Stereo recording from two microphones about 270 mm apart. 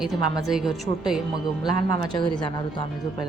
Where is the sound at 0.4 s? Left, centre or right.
Centre.